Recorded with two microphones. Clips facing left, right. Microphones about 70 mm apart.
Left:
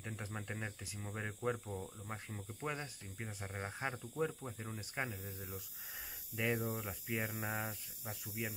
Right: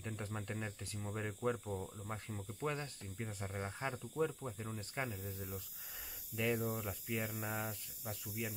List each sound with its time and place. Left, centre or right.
0.0 s speech: centre